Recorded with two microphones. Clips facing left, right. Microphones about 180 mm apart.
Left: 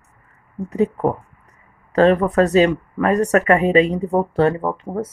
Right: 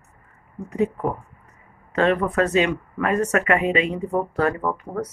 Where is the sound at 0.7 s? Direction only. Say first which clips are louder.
Left 4 dB; 35° left (ahead or behind).